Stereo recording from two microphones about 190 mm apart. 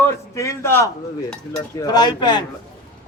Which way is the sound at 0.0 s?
15° left (ahead or behind).